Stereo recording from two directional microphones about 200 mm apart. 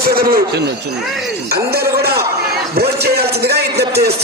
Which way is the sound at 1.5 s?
50° right (ahead or behind).